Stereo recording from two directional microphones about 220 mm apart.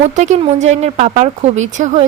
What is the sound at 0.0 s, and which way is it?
Speech, 30° right (ahead or behind).